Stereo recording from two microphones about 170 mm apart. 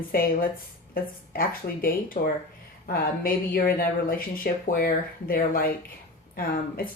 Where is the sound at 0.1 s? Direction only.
55° left (ahead or behind).